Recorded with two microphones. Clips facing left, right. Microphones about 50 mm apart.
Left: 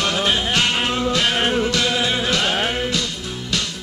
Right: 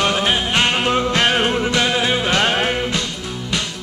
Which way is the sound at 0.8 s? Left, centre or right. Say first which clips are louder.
Right 3 dB; right.